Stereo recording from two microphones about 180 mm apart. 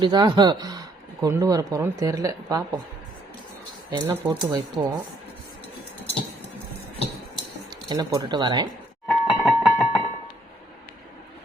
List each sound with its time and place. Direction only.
0.0 s speech: 25° right (ahead or behind)
3.9 s speech: 20° right (ahead or behind)
7.9 s speech: 20° right (ahead or behind)
9.0 s music: centre (ahead or behind)